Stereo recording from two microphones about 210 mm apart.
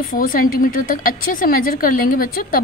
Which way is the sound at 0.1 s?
40° left (ahead or behind).